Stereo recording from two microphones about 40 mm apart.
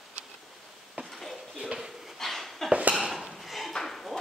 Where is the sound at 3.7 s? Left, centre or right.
Centre.